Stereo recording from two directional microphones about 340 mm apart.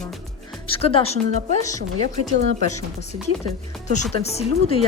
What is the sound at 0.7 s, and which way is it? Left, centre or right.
Speech, centre.